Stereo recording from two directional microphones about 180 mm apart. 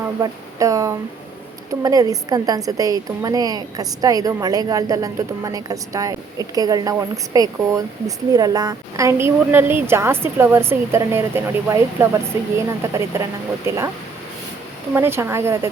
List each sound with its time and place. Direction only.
0.0 s a woman's voice: 20° right (ahead or behind)
14.9 s a woman's voice: 15° right (ahead or behind)